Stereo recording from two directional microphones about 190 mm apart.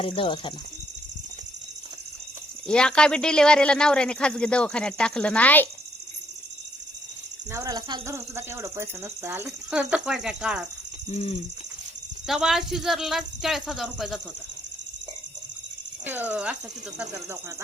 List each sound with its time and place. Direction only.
0.0 s speech: 30° left (ahead or behind)
2.6 s a man's voice: 5° left (ahead or behind)
7.5 s speech: 20° right (ahead or behind)
11.1 s bird: 30° left (ahead or behind)
12.3 s a man's voice: centre (ahead or behind)
16.0 s speech: 10° right (ahead or behind)